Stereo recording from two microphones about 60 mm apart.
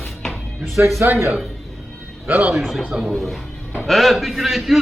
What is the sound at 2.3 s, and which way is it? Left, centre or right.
Speech, right.